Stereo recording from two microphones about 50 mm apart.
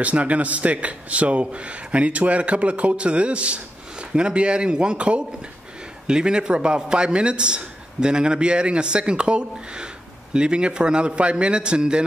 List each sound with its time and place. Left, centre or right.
0.0 s a man's voice: right